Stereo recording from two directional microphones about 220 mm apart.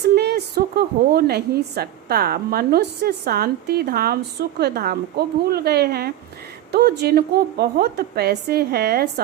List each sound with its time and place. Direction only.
0.2 s a woman's voice: 50° right (ahead or behind)